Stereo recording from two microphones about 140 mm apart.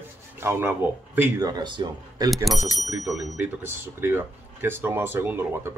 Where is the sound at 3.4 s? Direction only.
15° right (ahead or behind).